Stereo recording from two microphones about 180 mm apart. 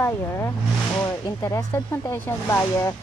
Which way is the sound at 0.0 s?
15° left (ahead or behind).